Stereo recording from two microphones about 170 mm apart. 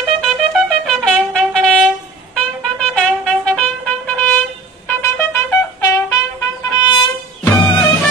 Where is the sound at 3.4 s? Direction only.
5° left (ahead or behind).